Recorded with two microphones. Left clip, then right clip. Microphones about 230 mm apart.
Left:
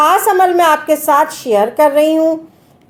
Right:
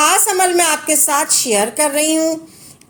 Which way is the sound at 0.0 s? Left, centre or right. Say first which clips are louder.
Left 4 dB; right.